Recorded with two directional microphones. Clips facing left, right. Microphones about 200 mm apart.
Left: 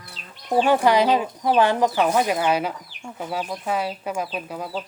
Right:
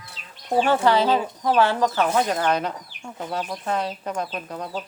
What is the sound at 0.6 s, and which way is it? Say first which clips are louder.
Speech: left 2 dB; 15° left (ahead or behind).